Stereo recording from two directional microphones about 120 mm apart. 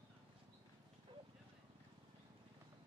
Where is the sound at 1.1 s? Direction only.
40° right (ahead or behind).